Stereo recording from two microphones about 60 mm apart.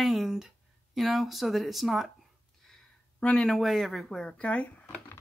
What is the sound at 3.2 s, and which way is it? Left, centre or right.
Speech, left.